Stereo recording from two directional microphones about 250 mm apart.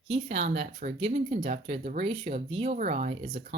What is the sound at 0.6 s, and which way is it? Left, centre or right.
Speech, right.